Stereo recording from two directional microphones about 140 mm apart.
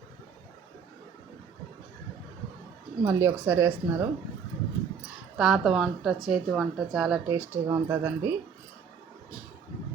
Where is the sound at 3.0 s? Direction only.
15° right (ahead or behind).